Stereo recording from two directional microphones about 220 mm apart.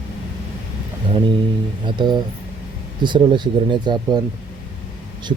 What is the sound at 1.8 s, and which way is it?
Speech, 20° right (ahead or behind).